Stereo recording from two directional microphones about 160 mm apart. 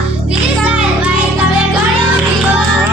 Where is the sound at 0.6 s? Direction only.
10° right (ahead or behind).